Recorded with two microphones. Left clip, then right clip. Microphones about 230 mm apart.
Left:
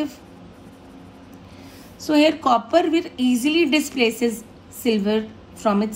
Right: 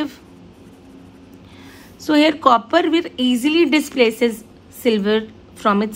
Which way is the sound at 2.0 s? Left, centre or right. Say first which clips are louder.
Right 3 dB; centre.